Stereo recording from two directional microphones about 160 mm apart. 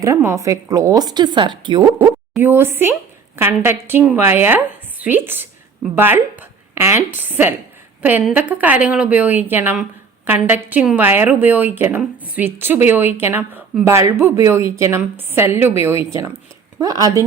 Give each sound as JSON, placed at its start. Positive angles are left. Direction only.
{"t": 0.0, "sound": "a woman's voice", "side_deg": -20}
{"t": 2.3, "sound": "a woman's voice", "side_deg": -15}